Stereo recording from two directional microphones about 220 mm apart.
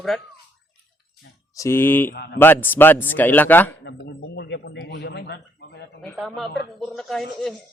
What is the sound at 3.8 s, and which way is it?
A man's voice, 50° left (ahead or behind).